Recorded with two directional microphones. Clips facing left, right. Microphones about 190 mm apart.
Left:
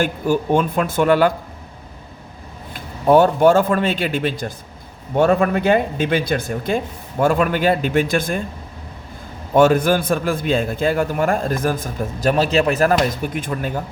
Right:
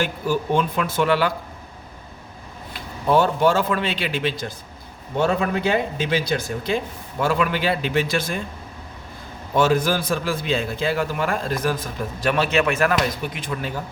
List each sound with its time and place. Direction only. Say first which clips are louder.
0.0 s a man's voice: left 4 dB; 50° left (ahead or behind)
2.7 s a man's voice: left 6 dB; 50° left (ahead or behind)
9.6 s a man's voice: left 5 dB; 55° left (ahead or behind)